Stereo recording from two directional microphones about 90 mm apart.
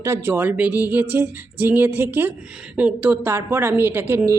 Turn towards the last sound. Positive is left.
turn(degrees=-20)  # may be behind; listen again after turning